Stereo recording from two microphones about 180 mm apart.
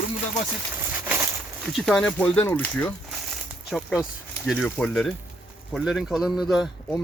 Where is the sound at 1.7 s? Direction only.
Centre (ahead or behind).